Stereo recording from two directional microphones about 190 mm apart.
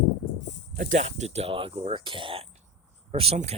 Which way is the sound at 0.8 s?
40° right (ahead or behind).